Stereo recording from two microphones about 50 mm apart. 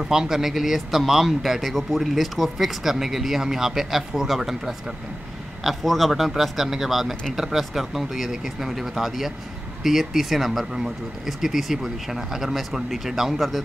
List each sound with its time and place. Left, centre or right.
0.0 s speech: centre